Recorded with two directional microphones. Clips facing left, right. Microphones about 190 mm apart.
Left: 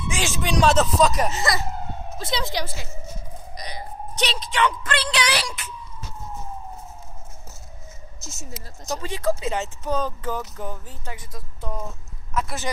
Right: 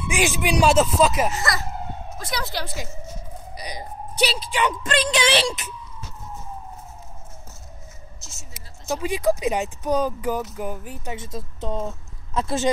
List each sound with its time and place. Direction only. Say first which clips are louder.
0.1 s speech: right 3 dB; 15° right (ahead or behind)
1.3 s speech: left 1 dB; 15° left (ahead or behind)
3.5 s a sound: right 1 dB; 10° right (ahead or behind)
4.6 s music: right 2 dB; 15° right (ahead or behind)
8.8 s speech: right 3 dB; 10° right (ahead or behind)
12.4 s music: right 4 dB; 30° right (ahead or behind)